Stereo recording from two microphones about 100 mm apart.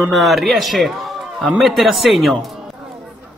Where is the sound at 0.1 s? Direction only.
Centre (ahead or behind).